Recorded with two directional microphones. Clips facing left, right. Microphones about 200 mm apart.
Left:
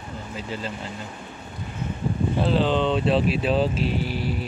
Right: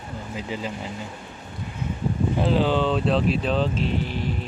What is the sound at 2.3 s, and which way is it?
Speech, 10° right (ahead or behind).